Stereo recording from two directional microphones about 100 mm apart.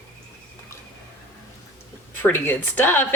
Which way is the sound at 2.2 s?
20° left (ahead or behind).